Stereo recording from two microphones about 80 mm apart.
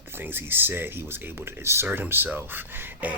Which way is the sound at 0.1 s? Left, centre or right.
Right.